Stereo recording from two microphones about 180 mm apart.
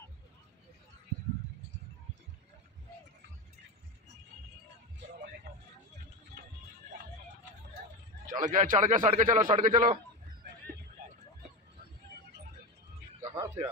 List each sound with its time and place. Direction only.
8.3 s a man's voice: 45° right (ahead or behind)
13.2 s music: 20° right (ahead or behind)